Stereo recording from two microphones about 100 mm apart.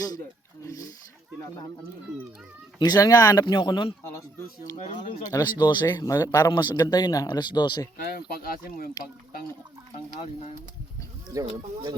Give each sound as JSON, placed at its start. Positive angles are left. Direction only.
{"t": 0.6, "sound": "speech", "side_deg": 35}
{"t": 2.7, "sound": "speech", "side_deg": 40}
{"t": 3.4, "sound": "speech", "side_deg": 50}
{"t": 4.0, "sound": "a sound", "side_deg": 25}
{"t": 5.3, "sound": "speech", "side_deg": 45}
{"t": 9.0, "sound": "speech", "side_deg": 35}
{"t": 11.3, "sound": "speech", "side_deg": -35}